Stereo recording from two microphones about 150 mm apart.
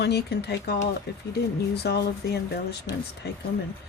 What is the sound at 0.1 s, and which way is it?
Speech, 90° left.